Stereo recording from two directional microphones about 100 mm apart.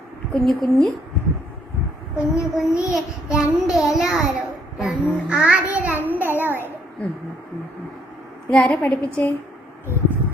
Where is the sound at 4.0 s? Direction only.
5° right (ahead or behind).